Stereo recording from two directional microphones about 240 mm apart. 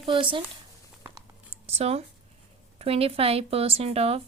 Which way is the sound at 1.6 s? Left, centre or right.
Right.